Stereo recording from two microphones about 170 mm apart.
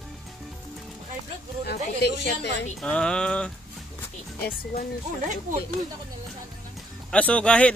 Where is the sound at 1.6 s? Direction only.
70° left (ahead or behind).